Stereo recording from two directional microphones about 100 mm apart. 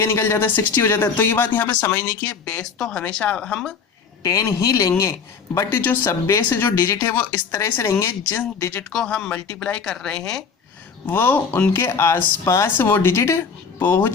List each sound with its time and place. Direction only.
0.0 s speech: 25° left (ahead or behind)
2.6 s speech: 5° left (ahead or behind)
4.2 s a man's voice: 35° left (ahead or behind)
5.8 s speech: 20° left (ahead or behind)
9.0 s speech: 5° left (ahead or behind)
11.0 s speech: 20° left (ahead or behind)